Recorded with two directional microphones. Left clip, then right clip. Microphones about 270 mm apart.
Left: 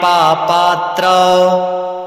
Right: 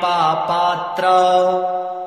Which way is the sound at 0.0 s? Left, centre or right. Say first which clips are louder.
Left 6 dB; left.